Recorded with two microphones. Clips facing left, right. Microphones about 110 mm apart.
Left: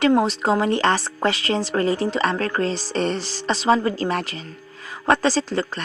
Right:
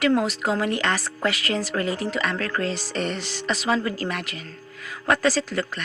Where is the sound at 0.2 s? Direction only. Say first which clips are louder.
Left 4 dB; 30° left (ahead or behind).